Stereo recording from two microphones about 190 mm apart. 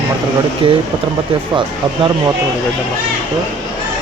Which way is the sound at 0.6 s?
30° right (ahead or behind).